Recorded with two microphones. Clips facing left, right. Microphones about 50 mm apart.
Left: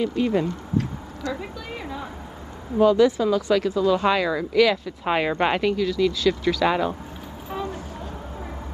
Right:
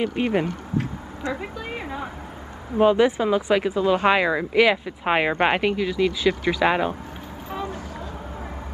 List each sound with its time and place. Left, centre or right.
0.0 s speech: right
0.7 s speech: centre